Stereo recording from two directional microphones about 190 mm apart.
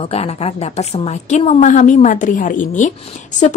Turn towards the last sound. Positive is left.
turn(degrees=40)  # may be behind; listen again after turning